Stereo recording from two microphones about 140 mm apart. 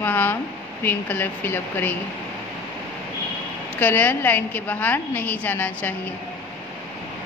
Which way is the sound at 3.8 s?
10° left (ahead or behind).